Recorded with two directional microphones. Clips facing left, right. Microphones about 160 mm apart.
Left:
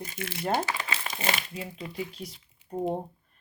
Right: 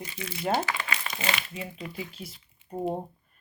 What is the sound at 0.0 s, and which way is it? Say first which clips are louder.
Speech: left 1 dB; 45° left (ahead or behind).